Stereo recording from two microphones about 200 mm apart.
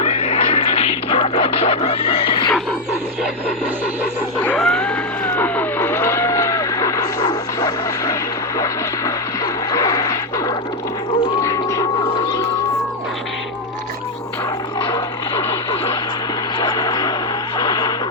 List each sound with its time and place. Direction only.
0.0 s music: 30° left (ahead or behind)
4.4 s cat: 5° left (ahead or behind)
8.5 s vehicle: 15° left (ahead or behind)
11.4 s a sound: 15° left (ahead or behind)
16.6 s vehicle: 20° left (ahead or behind)
17.6 s radio: 20° left (ahead or behind)